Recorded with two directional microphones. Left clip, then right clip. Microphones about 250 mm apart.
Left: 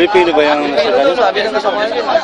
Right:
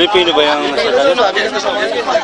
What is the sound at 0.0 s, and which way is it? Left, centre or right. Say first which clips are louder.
Speech: even; centre.